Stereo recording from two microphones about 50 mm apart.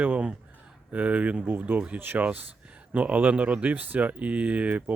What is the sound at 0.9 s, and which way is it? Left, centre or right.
Speech, right.